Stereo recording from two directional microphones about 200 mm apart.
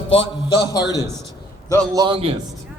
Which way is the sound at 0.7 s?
20° left (ahead or behind).